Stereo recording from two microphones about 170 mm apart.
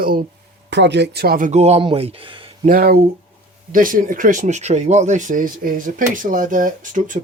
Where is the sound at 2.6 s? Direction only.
55° right (ahead or behind).